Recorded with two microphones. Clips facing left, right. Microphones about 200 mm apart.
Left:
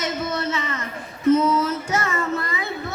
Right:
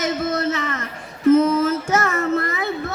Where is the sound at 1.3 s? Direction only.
45° right (ahead or behind).